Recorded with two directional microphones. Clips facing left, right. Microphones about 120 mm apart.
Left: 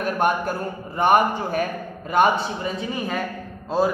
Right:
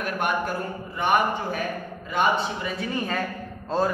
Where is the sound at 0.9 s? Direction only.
45° left (ahead or behind).